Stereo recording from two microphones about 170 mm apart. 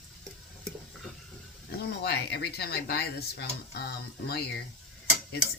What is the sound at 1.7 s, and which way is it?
Speech, 70° left (ahead or behind).